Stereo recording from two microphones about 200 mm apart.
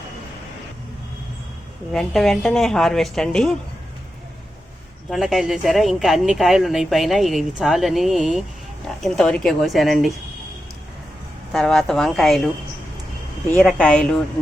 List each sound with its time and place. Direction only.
1.9 s speech: centre (ahead or behind)
5.1 s speech: centre (ahead or behind)
11.5 s speech: centre (ahead or behind)
13.5 s speech: 5° left (ahead or behind)